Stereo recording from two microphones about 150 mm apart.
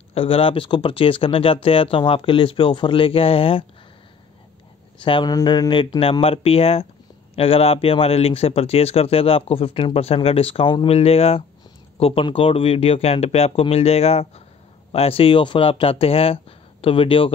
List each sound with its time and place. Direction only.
0.1 s a man's voice: 40° left (ahead or behind)
5.0 s a man's voice: 30° left (ahead or behind)